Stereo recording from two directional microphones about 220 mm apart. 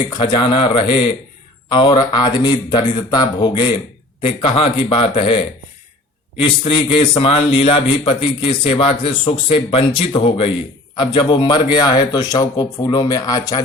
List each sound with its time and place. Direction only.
0.1 s a man's voice: 20° left (ahead or behind)